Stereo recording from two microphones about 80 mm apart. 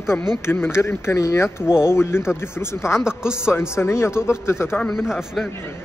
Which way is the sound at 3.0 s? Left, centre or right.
Centre.